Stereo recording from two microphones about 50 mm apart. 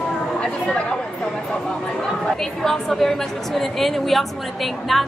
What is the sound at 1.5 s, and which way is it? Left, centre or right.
A woman's voice, centre.